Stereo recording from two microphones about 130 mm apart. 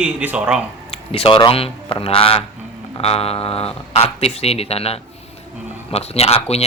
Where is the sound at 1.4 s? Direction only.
45° left (ahead or behind).